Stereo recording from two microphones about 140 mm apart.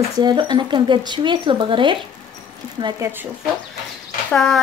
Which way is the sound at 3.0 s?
15° right (ahead or behind).